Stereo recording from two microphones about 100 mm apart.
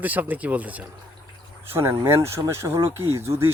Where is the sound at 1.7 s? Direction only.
25° right (ahead or behind).